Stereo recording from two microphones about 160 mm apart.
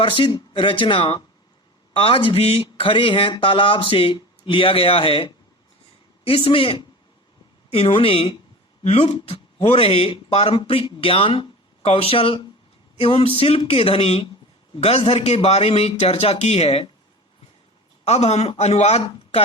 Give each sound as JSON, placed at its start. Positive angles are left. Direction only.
{"t": 0.0, "sound": "speech", "side_deg": 30}
{"t": 18.0, "sound": "speech", "side_deg": 45}